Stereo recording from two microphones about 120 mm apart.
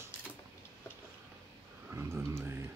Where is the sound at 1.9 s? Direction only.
25° right (ahead or behind).